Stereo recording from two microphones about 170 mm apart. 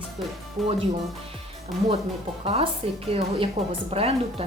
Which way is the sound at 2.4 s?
35° right (ahead or behind).